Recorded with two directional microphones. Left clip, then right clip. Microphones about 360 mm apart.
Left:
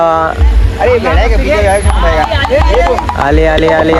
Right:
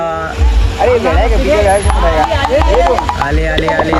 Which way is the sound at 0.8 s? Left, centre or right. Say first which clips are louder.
Left 1 dB; left.